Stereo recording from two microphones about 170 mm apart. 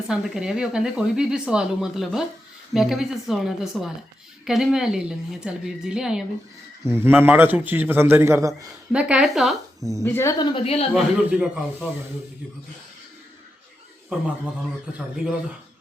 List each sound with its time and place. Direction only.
0.1 s speech: 5° right (ahead or behind)
6.8 s a man's voice: 15° right (ahead or behind)
8.9 s speech: 5° right (ahead or behind)
10.0 s a woman's voice: 15° left (ahead or behind); by 10.8 s 35° left (ahead or behind)
10.9 s a man's voice: 10° right (ahead or behind)
14.9 s speech: 5° right (ahead or behind)